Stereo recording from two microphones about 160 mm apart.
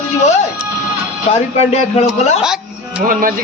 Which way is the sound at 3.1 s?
60° right (ahead or behind).